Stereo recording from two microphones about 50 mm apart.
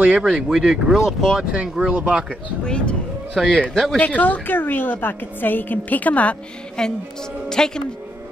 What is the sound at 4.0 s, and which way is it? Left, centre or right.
A woman's voice, left.